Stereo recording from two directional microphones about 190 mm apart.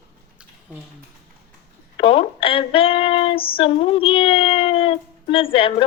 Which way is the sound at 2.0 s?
30° left (ahead or behind).